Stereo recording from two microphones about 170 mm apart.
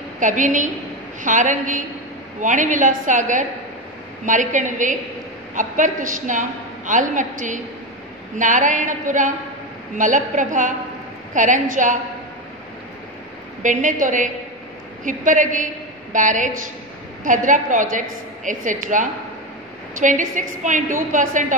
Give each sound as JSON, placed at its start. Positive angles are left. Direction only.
{"t": 0.2, "sound": "a woman's voice", "side_deg": -50}
{"t": 13.6, "sound": "a woman's voice", "side_deg": -50}